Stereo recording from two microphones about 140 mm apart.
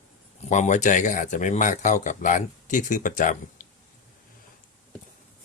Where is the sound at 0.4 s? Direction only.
60° left (ahead or behind).